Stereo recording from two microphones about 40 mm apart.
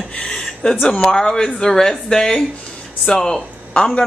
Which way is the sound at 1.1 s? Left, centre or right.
Centre.